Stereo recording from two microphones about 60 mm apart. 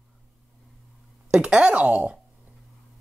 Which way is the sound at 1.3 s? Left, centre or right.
Centre.